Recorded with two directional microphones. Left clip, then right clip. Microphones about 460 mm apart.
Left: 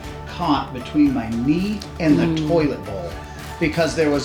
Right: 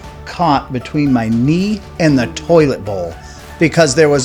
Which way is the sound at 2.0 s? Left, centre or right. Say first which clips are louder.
Right 4 dB; right.